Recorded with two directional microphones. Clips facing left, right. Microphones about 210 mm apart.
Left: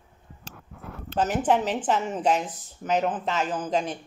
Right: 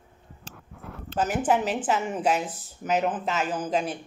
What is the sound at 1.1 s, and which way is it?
A woman's voice, 10° right (ahead or behind).